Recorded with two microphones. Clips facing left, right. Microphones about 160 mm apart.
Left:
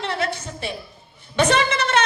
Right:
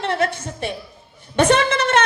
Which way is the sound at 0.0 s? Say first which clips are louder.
Right 4 dB; 50° right (ahead or behind).